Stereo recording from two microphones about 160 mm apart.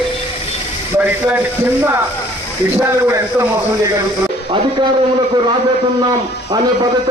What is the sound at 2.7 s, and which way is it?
Speech, 15° right (ahead or behind).